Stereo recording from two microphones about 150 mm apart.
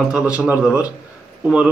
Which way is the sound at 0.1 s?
5° right (ahead or behind).